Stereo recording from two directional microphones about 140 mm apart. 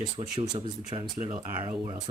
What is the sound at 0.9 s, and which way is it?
Speech, 40° right (ahead or behind).